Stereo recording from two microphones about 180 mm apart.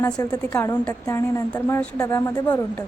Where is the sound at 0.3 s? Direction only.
10° left (ahead or behind).